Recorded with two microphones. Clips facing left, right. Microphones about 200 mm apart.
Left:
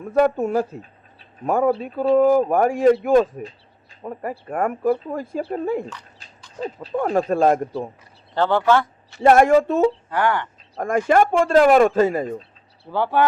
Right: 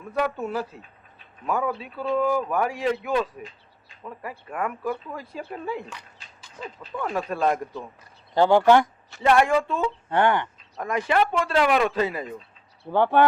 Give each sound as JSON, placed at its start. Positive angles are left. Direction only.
{"t": 0.0, "sound": "speech", "side_deg": 45}
{"t": 5.4, "sound": "speech", "side_deg": 35}
{"t": 8.4, "sound": "speech", "side_deg": -15}
{"t": 9.2, "sound": "speech", "side_deg": 45}
{"t": 10.1, "sound": "speech", "side_deg": -25}
{"t": 10.8, "sound": "speech", "side_deg": 45}
{"t": 12.9, "sound": "speech", "side_deg": -20}